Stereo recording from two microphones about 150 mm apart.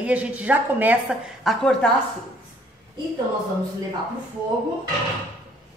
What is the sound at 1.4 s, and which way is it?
Speech, 5° left (ahead or behind).